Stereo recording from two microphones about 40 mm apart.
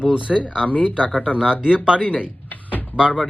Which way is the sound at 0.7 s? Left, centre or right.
Left.